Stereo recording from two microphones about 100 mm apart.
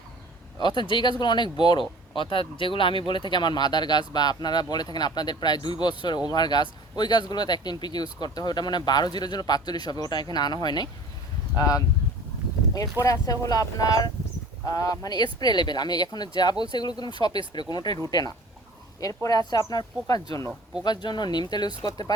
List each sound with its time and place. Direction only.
0.6 s speech: 50° left (ahead or behind); by 11.8 s 35° left (ahead or behind)
13.0 s speech: 35° left (ahead or behind)